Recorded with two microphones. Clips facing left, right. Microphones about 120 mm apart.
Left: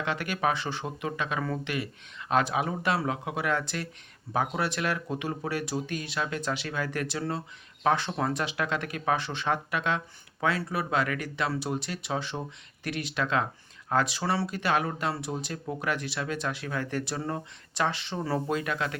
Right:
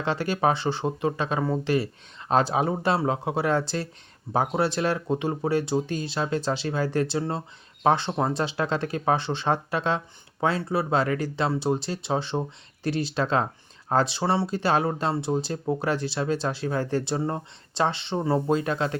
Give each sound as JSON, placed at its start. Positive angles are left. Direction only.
{"t": 0.0, "sound": "speech", "side_deg": -30}